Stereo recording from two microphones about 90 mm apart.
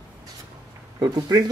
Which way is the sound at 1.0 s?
45° right (ahead or behind).